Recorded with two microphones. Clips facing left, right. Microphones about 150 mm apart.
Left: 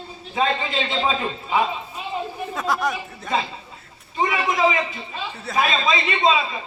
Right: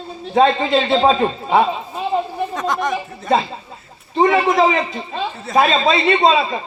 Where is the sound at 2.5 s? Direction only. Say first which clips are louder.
Right 2 dB; 5° left (ahead or behind).